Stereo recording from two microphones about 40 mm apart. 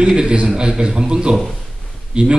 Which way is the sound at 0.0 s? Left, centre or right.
Right.